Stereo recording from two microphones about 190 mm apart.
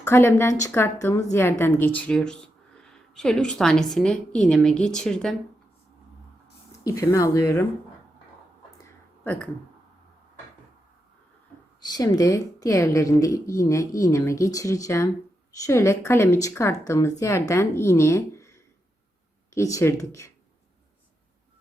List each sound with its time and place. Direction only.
0.0 s a woman's voice: 15° left (ahead or behind)
6.8 s a woman's voice: 15° left (ahead or behind)
9.2 s speech: 10° left (ahead or behind)
11.9 s a woman's voice: 20° left (ahead or behind)